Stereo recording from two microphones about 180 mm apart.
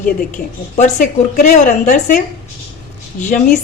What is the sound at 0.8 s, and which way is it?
Speech, 45° left (ahead or behind).